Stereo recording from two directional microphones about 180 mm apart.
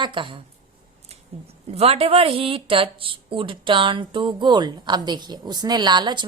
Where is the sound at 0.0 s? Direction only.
25° right (ahead or behind).